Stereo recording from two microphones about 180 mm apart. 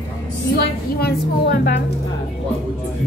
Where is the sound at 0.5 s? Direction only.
65° left (ahead or behind).